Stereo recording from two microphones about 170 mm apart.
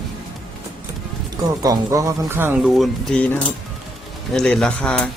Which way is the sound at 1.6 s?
20° right (ahead or behind).